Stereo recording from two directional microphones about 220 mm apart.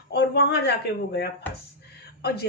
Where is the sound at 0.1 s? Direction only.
45° left (ahead or behind).